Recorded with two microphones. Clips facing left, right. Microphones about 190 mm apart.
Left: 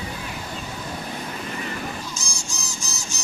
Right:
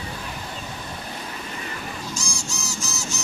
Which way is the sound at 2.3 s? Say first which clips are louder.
Right 3 dB; 20° left (ahead or behind).